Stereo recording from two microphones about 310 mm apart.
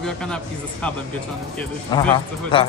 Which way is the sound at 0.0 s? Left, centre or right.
Centre.